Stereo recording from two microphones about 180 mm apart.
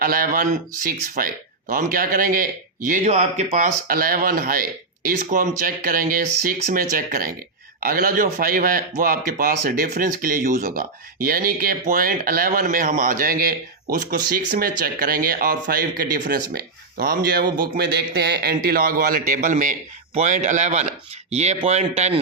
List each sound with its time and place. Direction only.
0.0 s a man's voice: 55° right (ahead or behind)
3.8 s a man's voice: 55° right (ahead or behind); by 22.2 s 35° right (ahead or behind)